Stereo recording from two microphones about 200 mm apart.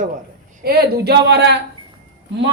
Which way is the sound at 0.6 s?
50° right (ahead or behind).